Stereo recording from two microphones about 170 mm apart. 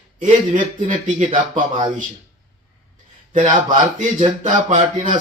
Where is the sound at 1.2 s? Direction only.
45° right (ahead or behind).